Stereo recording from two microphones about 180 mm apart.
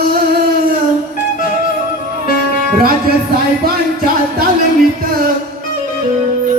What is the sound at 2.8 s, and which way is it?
Music, 55° right (ahead or behind).